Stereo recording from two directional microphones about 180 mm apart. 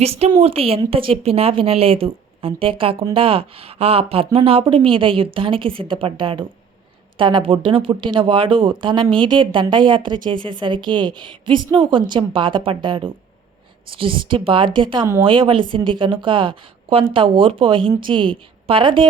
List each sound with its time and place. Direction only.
0.0 s a woman's voice: 35° right (ahead or behind)